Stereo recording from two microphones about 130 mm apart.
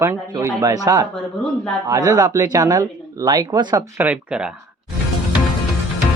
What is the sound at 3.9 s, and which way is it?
Speech, 10° right (ahead or behind).